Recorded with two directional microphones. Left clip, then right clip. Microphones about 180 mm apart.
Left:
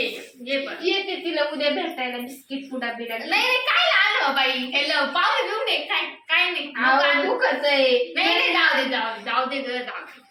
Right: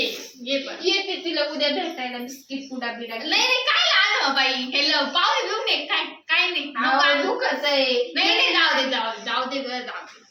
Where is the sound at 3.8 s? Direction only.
Centre (ahead or behind).